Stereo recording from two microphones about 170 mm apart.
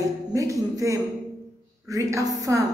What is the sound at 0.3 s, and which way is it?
A woman's voice, 20° right (ahead or behind).